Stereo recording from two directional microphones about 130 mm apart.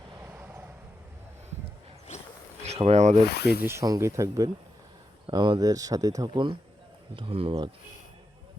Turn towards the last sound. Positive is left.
turn(degrees=-45)  # may be behind; listen again after turning